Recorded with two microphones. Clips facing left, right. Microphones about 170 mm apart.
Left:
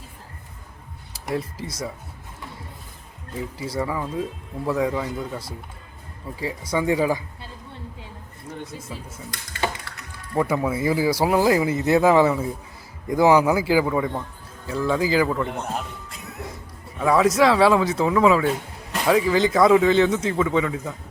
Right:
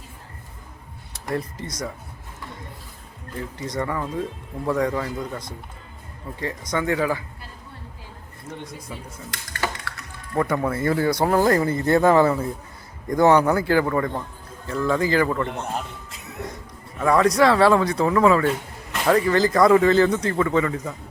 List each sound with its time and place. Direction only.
1.3 s speech: 5° left (ahead or behind)
3.3 s speech: 5° left (ahead or behind)
8.5 s speech: 10° left (ahead or behind)
9.5 s a sound: 20° left (ahead or behind)
10.3 s speech: 5° left (ahead or behind)
16.0 s music: centre (ahead or behind)
17.0 s speech: 5° left (ahead or behind)